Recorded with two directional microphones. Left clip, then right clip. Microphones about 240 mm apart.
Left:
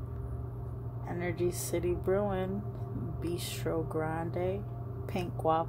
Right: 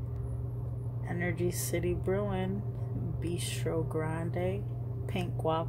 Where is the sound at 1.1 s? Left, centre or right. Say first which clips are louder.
Left 1 dB; centre.